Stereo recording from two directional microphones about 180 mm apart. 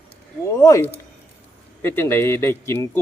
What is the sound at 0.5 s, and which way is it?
Speech, 20° left (ahead or behind).